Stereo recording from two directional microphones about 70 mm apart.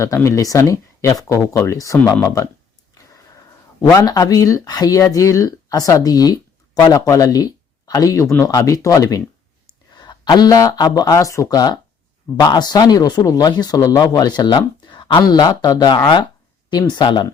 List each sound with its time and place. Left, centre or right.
0.0 s speech: left
3.9 s speech: left
9.9 s speech: left
12.4 s speech: left
16.6 s speech: left